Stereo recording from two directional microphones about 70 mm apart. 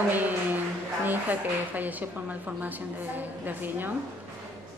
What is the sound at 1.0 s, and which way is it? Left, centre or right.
A woman's voice, right.